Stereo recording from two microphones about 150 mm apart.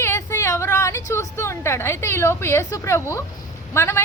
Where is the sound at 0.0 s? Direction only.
15° left (ahead or behind).